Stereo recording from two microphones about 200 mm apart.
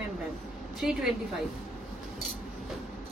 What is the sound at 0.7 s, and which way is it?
Speech, centre (ahead or behind).